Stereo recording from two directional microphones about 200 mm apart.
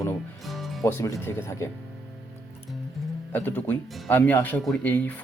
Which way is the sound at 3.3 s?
10° left (ahead or behind).